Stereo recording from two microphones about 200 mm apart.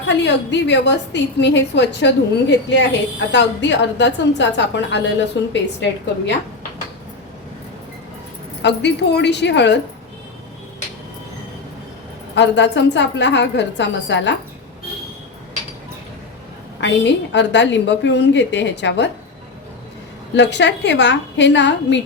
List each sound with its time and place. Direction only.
0.1 s a woman's voice: 60° left (ahead or behind)
8.6 s a woman's voice: 60° left (ahead or behind)
12.3 s a woman's voice: 60° left (ahead or behind)
16.8 s a woman's voice: 60° left (ahead or behind)
20.3 s a woman's voice: 60° left (ahead or behind)